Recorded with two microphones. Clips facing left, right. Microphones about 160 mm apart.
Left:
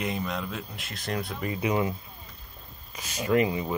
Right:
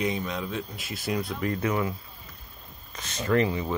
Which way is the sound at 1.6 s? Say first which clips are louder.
Left 4 dB; 20° left (ahead or behind).